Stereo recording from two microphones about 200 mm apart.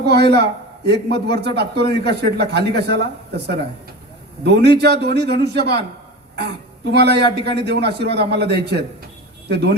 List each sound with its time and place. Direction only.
0.0 s a man's voice: 55° right (ahead or behind)
6.9 s a man's voice: 55° right (ahead or behind)